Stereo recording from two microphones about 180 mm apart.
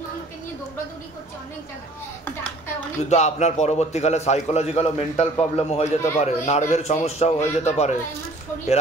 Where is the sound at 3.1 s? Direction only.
40° left (ahead or behind).